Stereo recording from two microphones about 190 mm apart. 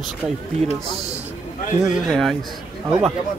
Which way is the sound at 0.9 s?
35° right (ahead or behind).